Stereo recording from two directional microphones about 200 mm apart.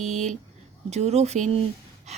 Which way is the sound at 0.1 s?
35° right (ahead or behind).